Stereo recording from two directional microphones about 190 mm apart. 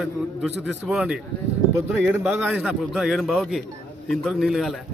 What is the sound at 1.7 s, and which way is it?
A man's voice, 15° right (ahead or behind).